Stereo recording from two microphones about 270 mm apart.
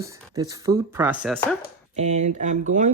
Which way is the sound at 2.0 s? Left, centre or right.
Right.